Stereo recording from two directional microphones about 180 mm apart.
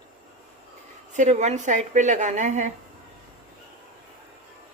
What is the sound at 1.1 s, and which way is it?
Speech, 40° right (ahead or behind).